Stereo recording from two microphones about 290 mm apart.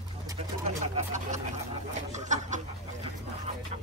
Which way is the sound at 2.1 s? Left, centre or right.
Right.